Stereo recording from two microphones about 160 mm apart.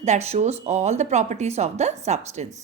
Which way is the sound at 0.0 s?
45° right (ahead or behind).